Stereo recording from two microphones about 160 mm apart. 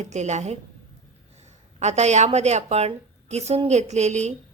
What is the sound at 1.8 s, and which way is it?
Speech, 45° right (ahead or behind).